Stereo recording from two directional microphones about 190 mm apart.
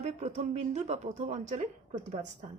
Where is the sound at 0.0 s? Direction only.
35° right (ahead or behind).